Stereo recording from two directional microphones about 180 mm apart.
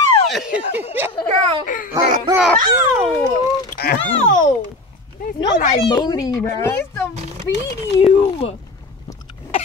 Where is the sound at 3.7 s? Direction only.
55° left (ahead or behind).